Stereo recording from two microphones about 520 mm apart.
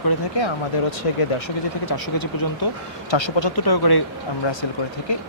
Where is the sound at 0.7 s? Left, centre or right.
Left.